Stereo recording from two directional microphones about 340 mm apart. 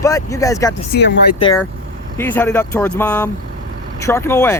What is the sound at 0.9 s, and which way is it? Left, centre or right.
Speech, left.